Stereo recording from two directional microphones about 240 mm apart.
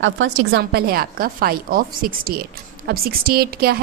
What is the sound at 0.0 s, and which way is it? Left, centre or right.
A woman's voice, right.